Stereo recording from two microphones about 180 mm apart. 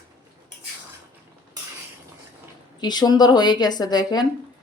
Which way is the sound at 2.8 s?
25° left (ahead or behind).